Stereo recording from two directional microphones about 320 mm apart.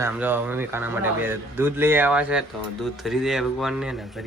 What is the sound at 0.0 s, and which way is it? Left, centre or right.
Speech, centre.